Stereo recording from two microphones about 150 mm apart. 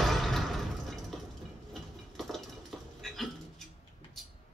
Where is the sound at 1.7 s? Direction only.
Centre (ahead or behind).